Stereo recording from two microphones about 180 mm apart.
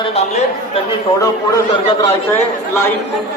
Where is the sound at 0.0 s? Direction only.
35° left (ahead or behind).